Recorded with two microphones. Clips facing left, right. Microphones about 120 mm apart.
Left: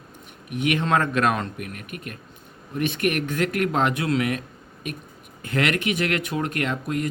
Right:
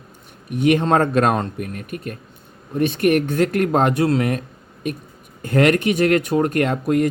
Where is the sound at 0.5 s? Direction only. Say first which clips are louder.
Right 6 dB; 35° right (ahead or behind).